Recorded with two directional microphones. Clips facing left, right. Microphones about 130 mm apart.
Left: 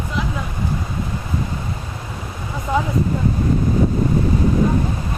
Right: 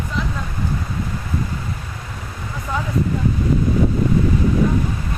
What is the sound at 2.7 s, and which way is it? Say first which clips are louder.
Speech: left 5 dB; 20° left (ahead or behind).